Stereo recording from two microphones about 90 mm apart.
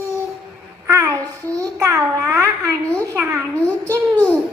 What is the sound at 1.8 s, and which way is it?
Babbling, 40° right (ahead or behind).